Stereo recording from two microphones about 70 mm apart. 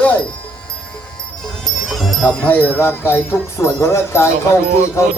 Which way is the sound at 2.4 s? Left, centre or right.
Left.